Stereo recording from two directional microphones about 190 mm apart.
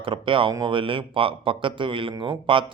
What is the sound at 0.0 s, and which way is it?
Speech, 25° right (ahead or behind).